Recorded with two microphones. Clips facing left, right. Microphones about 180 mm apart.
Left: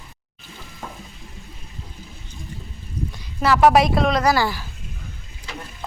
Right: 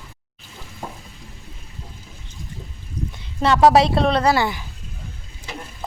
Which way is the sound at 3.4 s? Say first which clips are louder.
Right 1 dB; 30° right (ahead or behind).